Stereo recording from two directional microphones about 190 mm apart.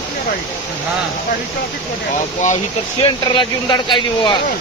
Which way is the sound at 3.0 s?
25° left (ahead or behind).